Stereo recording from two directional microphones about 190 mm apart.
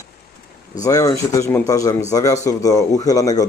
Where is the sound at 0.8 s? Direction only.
15° left (ahead or behind).